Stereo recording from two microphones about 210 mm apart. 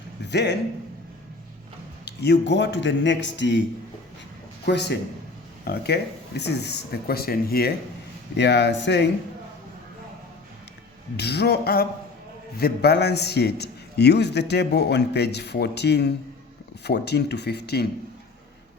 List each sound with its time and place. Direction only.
0.3 s a man's voice: 55° left (ahead or behind)
2.0 s speech: 50° left (ahead or behind)
4.6 s a man's voice: 55° left (ahead or behind)
11.2 s a man's voice: 50° left (ahead or behind)